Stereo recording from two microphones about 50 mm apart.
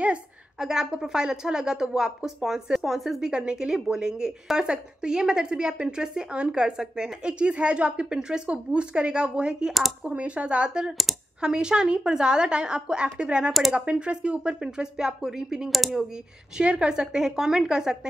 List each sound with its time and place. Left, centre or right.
0.6 s speech: centre
3.2 s speech: centre
16.5 s speech: centre